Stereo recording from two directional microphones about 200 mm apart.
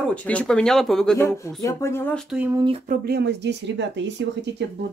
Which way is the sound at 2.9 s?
50° right (ahead or behind).